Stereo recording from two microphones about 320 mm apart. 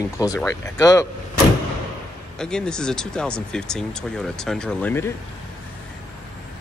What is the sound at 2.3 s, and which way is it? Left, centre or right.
Speech, centre.